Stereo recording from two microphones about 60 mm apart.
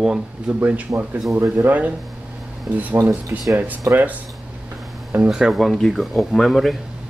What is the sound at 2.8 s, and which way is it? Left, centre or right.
Speech, right.